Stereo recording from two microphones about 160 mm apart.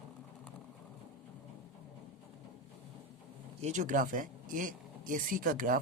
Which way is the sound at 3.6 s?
50° right (ahead or behind).